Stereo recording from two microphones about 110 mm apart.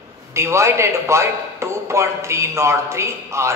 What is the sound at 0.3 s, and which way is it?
A man's voice, 25° right (ahead or behind).